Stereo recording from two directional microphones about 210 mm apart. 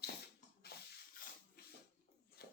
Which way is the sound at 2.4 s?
50° left (ahead or behind).